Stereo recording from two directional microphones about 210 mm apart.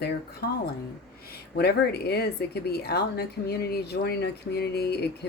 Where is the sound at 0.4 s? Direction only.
45° left (ahead or behind).